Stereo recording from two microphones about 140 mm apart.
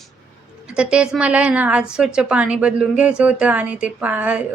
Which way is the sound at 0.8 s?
5° right (ahead or behind).